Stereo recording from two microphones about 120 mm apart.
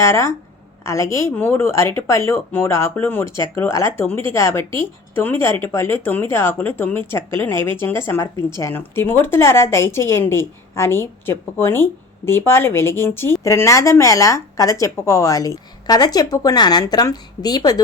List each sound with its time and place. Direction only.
0.0 s a woman's voice: 25° left (ahead or behind)